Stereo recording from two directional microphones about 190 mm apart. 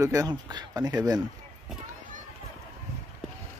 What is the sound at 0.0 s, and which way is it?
Speech, 20° right (ahead or behind).